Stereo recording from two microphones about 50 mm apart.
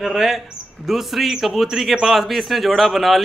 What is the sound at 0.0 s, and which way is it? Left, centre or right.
A man's voice, centre.